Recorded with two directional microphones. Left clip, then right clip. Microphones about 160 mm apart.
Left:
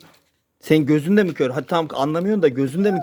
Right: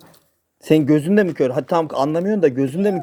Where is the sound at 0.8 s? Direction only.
15° left (ahead or behind).